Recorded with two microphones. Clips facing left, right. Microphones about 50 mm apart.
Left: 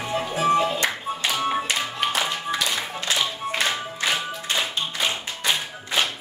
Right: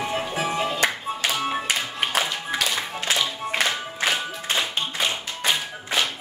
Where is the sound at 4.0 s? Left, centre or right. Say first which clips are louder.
Right 2 dB; right.